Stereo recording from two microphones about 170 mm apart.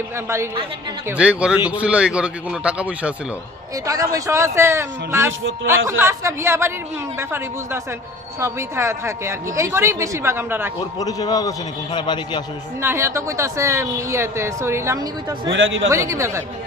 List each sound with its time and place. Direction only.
1.1 s speech: 5° right (ahead or behind)
3.8 s speech: 20° right (ahead or behind)
10.8 s a man's voice: 25° left (ahead or behind)
12.8 s speech: 15° right (ahead or behind)